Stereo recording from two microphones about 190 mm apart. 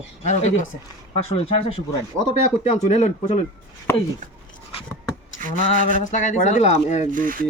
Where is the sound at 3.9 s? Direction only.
15° left (ahead or behind).